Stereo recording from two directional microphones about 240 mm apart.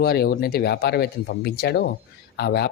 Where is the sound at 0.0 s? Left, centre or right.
Left.